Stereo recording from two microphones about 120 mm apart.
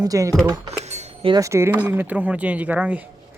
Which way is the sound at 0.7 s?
65° right (ahead or behind).